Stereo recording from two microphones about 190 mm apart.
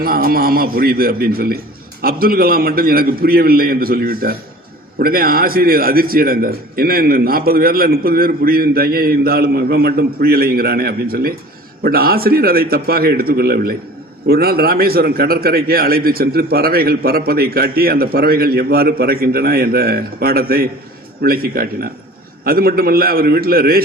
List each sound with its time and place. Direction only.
0.0 s a man's voice: 50° right (ahead or behind)